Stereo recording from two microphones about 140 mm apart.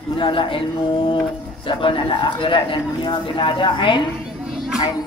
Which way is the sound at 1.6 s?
35° left (ahead or behind).